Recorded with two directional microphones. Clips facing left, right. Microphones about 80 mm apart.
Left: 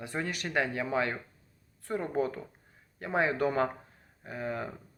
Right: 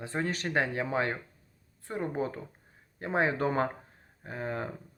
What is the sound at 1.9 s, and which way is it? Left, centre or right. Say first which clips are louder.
Speech: left 2 dB; right.